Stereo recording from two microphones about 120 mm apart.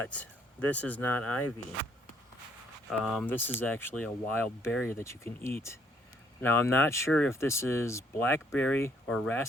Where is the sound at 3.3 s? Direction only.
15° left (ahead or behind).